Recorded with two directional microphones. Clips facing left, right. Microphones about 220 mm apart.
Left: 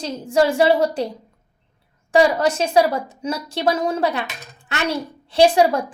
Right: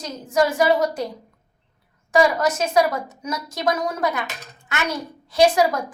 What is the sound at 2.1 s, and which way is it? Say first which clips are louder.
A woman's voice: left 2 dB; 30° left (ahead or behind).